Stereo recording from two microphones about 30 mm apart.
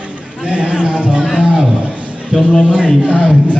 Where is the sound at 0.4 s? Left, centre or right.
Right.